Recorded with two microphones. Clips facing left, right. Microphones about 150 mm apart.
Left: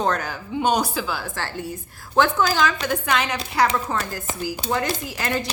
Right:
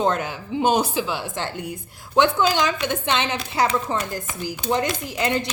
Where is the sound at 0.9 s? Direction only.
20° right (ahead or behind).